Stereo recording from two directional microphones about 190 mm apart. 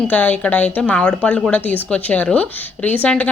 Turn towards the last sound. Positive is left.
turn(degrees=10)  # may be behind; listen again after turning